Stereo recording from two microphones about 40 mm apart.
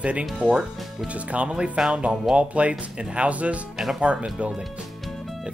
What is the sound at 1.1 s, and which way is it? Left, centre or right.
Speech, right.